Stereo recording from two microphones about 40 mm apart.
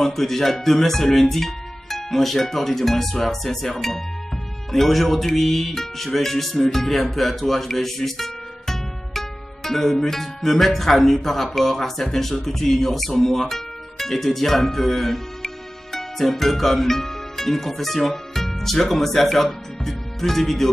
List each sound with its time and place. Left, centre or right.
0.0 s speech: centre